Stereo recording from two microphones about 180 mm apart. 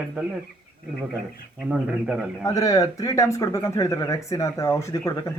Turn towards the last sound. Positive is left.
turn(degrees=20)  # may be behind; listen again after turning